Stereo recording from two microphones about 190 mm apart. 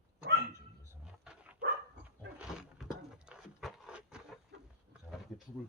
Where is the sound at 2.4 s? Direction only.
5° right (ahead or behind).